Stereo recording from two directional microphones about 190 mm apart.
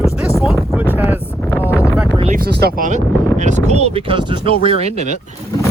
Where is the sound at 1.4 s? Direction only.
10° left (ahead or behind).